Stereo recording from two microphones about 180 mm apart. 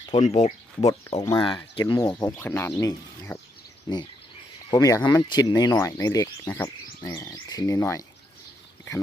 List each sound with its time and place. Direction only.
0.2 s speech: 40° left (ahead or behind)
1.2 s speech: 25° left (ahead or behind)
1.8 s speech: 15° left (ahead or behind)